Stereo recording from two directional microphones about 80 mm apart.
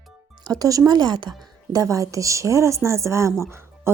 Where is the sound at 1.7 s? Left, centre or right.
Right.